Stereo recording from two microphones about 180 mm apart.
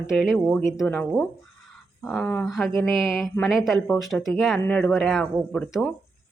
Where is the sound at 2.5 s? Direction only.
Centre (ahead or behind).